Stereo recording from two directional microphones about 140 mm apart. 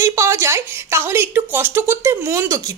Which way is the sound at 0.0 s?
20° right (ahead or behind).